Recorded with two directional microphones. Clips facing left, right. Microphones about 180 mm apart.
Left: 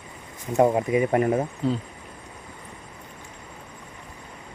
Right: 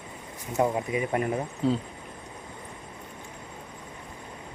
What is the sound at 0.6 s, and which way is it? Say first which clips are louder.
Speech: left 6 dB; 25° left (ahead or behind).